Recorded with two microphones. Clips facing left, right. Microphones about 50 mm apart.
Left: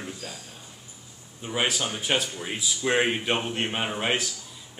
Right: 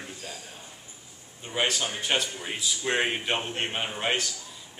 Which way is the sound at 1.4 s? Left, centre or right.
Centre.